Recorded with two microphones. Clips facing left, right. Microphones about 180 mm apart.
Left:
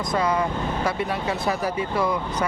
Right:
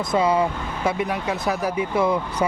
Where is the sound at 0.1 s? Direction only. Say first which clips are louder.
Right 4 dB; 25° right (ahead or behind).